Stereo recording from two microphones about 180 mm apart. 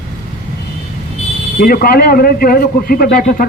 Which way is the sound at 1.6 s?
55° left (ahead or behind).